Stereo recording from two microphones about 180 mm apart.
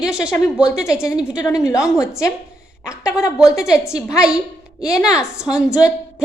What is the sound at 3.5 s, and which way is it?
A woman's voice, 5° right (ahead or behind).